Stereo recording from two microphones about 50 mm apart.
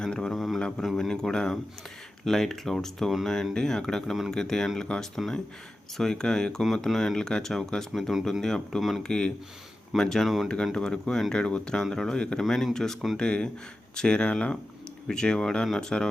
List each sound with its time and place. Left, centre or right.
0.0 s a sound: centre
0.3 s mantra: centre
0.8 s speech: centre
4.0 s speech: centre
10.2 s speech: centre
10.8 s speech: centre
12.4 s speech: centre
13.1 s speech: centre